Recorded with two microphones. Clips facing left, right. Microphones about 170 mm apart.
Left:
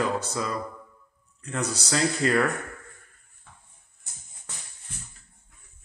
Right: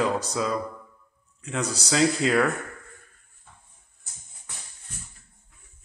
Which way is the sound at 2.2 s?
90° right.